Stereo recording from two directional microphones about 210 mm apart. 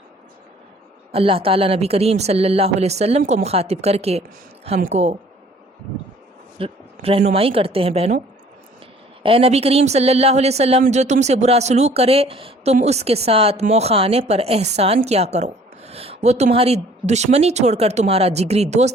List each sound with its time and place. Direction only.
1.1 s a woman's voice: 25° right (ahead or behind)
6.6 s a woman's voice: 25° right (ahead or behind)
9.2 s speech: 25° right (ahead or behind)